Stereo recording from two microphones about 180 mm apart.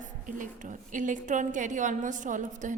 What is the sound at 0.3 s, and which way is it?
A woman's voice, 45° right (ahead or behind).